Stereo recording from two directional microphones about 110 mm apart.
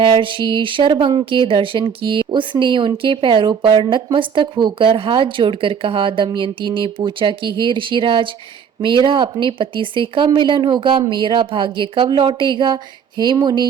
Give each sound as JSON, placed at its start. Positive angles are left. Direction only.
{"t": 0.2, "sound": "speech", "side_deg": -50}